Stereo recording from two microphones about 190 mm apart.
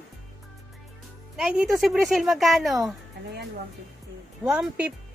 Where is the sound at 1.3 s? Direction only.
5° right (ahead or behind).